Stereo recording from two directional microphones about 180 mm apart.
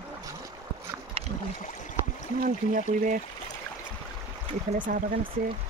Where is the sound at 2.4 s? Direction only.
45° right (ahead or behind).